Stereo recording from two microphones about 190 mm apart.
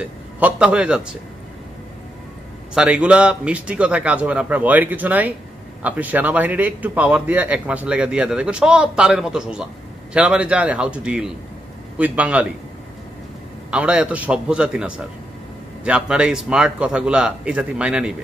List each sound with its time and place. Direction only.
0.0 s a man's voice: 5° right (ahead or behind)
2.7 s a man's voice: 5° right (ahead or behind)
13.7 s a man's voice: 5° right (ahead or behind)